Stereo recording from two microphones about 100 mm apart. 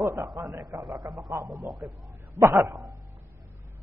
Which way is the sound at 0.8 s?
Centre (ahead or behind).